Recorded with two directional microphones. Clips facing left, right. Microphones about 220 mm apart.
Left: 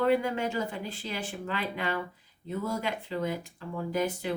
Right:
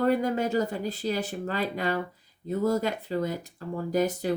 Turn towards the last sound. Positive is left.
turn(degrees=-40)  # may be behind; listen again after turning